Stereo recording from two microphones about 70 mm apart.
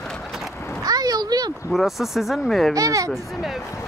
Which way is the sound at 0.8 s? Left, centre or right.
Right.